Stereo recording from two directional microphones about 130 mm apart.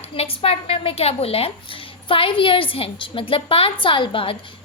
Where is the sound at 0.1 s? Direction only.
45° left (ahead or behind).